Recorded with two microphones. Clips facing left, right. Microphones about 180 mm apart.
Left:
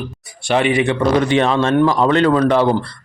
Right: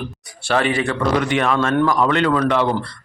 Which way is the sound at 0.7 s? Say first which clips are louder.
Left 4 dB; 20° left (ahead or behind).